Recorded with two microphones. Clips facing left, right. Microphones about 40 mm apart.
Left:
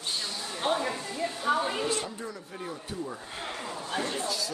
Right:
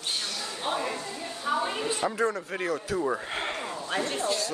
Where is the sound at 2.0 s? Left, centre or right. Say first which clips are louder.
Right 11 dB; right.